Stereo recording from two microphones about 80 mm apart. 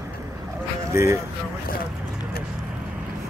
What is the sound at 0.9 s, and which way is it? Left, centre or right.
Speech, right.